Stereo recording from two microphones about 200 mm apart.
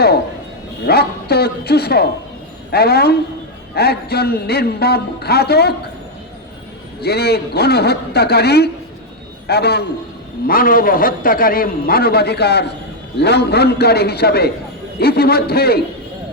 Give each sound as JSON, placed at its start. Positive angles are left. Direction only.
{"t": 0.9, "sound": "a man's voice", "side_deg": 50}
{"t": 7.0, "sound": "a man's voice", "side_deg": 55}